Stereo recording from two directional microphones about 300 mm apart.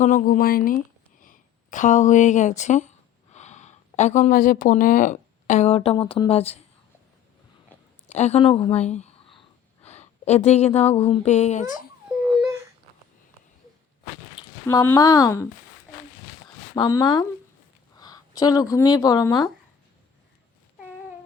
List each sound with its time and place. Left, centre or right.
0.0 s a woman's voice: left
8.0 s speech: left
14.7 s speech: centre
16.7 s speech: centre